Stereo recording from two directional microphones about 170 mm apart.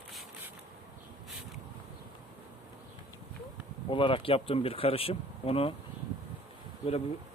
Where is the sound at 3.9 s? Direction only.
30° left (ahead or behind).